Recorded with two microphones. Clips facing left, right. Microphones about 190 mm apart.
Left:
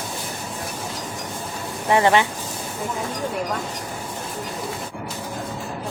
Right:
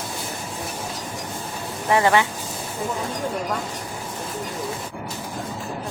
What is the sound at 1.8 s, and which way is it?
Speech, 20° left (ahead or behind).